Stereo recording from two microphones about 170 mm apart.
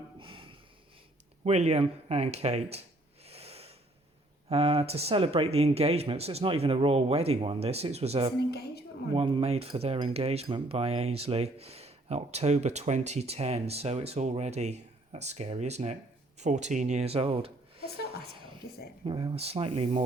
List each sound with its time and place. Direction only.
0.2 s snort: 30° right (ahead or behind)
1.5 s speech: 40° right (ahead or behind)
3.2 s a sound: 35° right (ahead or behind)
4.4 s speech: 35° right (ahead or behind)
8.4 s a woman's voice: 70° left (ahead or behind)
9.1 s speech: 30° right (ahead or behind)
19.0 s speech: 30° right (ahead or behind)